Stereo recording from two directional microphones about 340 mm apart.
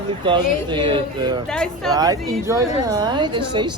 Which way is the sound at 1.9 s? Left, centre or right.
Centre.